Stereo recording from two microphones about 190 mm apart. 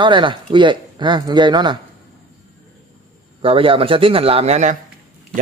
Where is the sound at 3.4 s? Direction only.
30° right (ahead or behind).